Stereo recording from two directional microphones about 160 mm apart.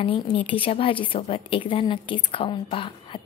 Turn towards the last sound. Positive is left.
turn(degrees=35)  # may be behind; listen again after turning